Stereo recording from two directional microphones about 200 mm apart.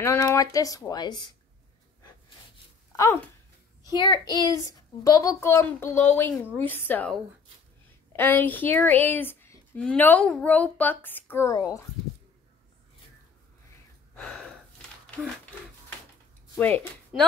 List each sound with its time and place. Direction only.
0.0 s speech: 15° left (ahead or behind)
3.8 s a child's voice: 20° left (ahead or behind)
8.2 s speech: 10° left (ahead or behind)
14.1 s gasp: 5° left (ahead or behind)
16.5 s speech: 10° left (ahead or behind)
17.1 s a woman's voice: 5° right (ahead or behind)